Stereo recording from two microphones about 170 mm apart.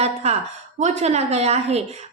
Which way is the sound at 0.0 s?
40° right (ahead or behind).